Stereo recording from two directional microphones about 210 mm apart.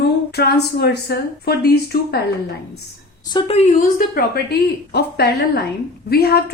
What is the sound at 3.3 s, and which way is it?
Speech, 30° left (ahead or behind).